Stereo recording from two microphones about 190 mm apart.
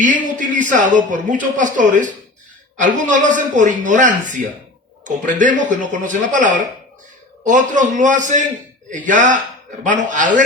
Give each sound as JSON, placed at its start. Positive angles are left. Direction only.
{"t": 0.0, "sound": "a man's voice", "side_deg": -40}